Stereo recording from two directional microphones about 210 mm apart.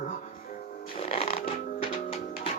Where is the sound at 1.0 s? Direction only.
25° left (ahead or behind).